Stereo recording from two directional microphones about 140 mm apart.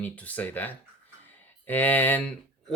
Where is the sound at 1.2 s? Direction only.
15° left (ahead or behind).